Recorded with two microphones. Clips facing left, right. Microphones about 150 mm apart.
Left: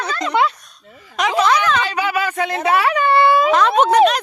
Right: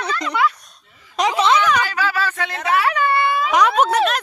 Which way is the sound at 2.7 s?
25° left (ahead or behind).